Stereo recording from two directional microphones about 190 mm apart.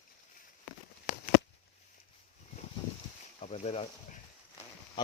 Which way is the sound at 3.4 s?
35° left (ahead or behind).